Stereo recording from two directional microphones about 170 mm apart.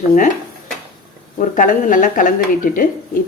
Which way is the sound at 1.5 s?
50° left (ahead or behind).